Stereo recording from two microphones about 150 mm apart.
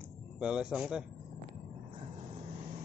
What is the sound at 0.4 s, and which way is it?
Speech, 5° right (ahead or behind).